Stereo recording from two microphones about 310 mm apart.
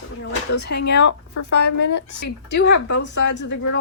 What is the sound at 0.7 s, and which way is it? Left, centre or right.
Speech, left.